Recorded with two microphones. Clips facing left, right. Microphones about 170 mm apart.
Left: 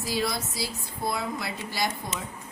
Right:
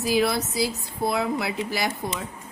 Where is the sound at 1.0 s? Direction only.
65° right (ahead or behind).